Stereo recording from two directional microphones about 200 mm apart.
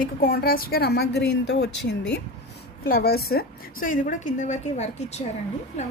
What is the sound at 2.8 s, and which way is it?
A woman's voice, 50° left (ahead or behind).